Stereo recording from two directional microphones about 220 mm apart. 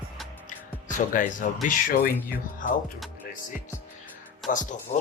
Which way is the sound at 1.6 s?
40° left (ahead or behind).